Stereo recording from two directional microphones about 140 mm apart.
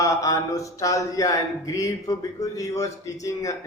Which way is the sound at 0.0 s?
25° left (ahead or behind).